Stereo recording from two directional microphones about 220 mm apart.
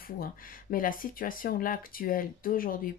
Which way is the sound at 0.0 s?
40° left (ahead or behind).